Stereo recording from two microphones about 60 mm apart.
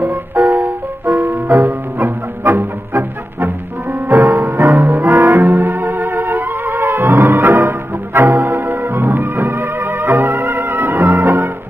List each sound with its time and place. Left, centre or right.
0.5 s music: right
5.2 s music: right